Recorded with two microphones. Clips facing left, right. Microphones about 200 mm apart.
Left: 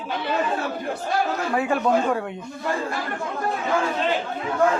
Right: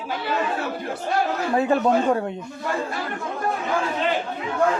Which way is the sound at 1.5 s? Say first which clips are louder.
Right 2 dB; 35° right (ahead or behind).